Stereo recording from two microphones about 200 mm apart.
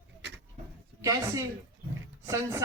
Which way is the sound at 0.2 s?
60° right (ahead or behind).